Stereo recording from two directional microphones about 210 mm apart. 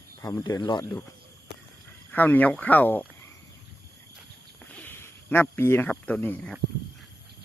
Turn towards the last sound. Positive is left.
turn(degrees=5)  # may be behind; listen again after turning